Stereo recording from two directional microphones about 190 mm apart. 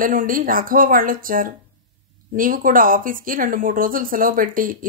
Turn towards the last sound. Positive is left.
turn(degrees=-45)  # may be behind; listen again after turning